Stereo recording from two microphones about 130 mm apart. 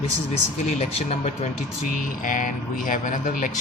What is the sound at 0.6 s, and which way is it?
Speech, 60° left (ahead or behind).